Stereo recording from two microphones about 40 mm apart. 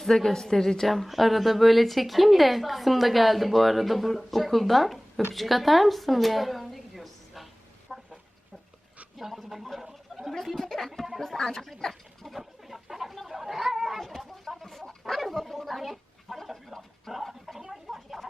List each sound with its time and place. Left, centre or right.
0.0 s a woman's voice: centre
7.9 s chicken: centre
9.1 s a woman's voice: centre
9.8 s gargling: centre
10.3 s speech: centre
11.2 s a sound: centre
14.0 s chicken: centre
15.1 s dog: centre
17.1 s a sound: centre